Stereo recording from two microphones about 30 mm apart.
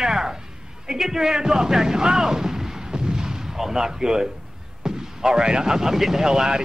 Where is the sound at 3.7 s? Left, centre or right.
Right.